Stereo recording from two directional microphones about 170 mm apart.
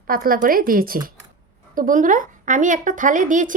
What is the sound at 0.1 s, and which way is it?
A woman's voice, 55° right (ahead or behind).